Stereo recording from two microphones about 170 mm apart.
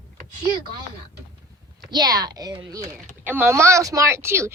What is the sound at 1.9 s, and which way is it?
A woman's voice, 25° right (ahead or behind).